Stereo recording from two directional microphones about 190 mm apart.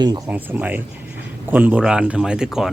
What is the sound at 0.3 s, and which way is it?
Speech, 10° right (ahead or behind).